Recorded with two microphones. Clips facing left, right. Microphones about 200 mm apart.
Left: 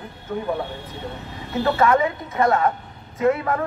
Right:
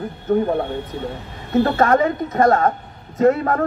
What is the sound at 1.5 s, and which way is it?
A woman's voice, 50° right (ahead or behind).